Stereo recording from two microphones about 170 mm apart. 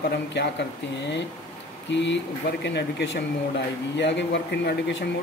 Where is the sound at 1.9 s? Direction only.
90° left.